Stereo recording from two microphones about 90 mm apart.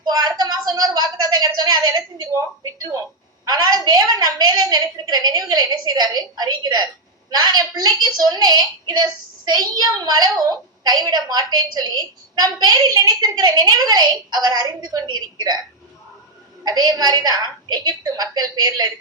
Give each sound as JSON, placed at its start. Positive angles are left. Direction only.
{"t": 0.0, "sound": "a sound", "side_deg": -45}
{"t": 3.4, "sound": "a woman's voice", "side_deg": -45}
{"t": 16.6, "sound": "a woman's voice", "side_deg": -45}